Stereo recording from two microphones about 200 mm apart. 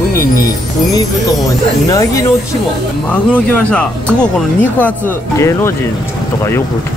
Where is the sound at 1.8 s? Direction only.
15° left (ahead or behind).